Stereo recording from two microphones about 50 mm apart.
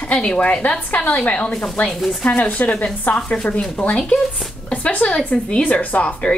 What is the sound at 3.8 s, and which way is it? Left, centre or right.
Speech, centre.